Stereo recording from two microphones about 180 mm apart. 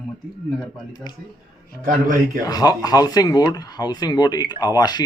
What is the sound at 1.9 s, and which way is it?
Speech, 45° right (ahead or behind).